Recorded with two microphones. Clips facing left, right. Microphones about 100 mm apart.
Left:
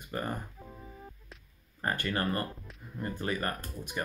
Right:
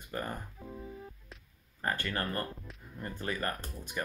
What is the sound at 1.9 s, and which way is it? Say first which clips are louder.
Speech: left 3 dB; 15° left (ahead or behind).